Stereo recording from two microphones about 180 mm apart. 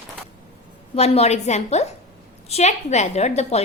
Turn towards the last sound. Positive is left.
turn(degrees=40)  # may be behind; listen again after turning